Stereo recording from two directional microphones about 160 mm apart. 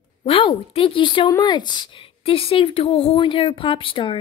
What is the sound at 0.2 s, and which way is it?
A woman's voice, 35° left (ahead or behind).